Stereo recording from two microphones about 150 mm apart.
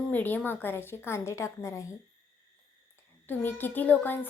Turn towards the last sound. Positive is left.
turn(degrees=10)  # may be behind; listen again after turning